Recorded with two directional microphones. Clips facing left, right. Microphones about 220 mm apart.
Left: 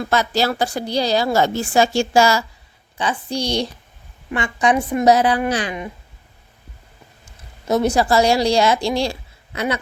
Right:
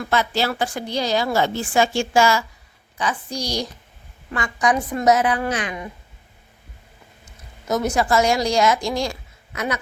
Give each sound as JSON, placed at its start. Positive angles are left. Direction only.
{"t": 0.0, "sound": "a woman's voice", "side_deg": 40}
{"t": 7.3, "sound": "speech", "side_deg": 30}